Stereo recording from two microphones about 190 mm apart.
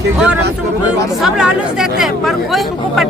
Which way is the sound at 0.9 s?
5° right (ahead or behind).